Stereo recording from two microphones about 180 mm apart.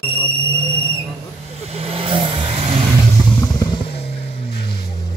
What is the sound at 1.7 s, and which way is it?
Vehicle, 30° right (ahead or behind).